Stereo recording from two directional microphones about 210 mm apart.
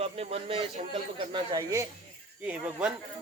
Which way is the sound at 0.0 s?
30° right (ahead or behind).